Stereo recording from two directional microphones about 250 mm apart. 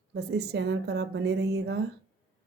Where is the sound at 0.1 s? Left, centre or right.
Right.